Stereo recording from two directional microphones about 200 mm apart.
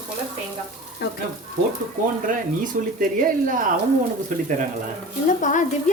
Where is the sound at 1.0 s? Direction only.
55° left (ahead or behind).